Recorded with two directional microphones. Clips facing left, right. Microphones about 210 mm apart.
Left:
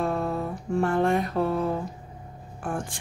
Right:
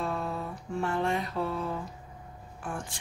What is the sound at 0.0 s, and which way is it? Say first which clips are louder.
Music: left 6 dB; 50° left (ahead or behind).